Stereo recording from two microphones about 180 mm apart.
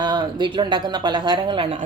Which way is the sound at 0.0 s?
25° right (ahead or behind).